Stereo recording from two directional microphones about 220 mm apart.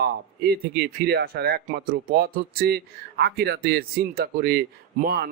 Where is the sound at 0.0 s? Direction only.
45° right (ahead or behind).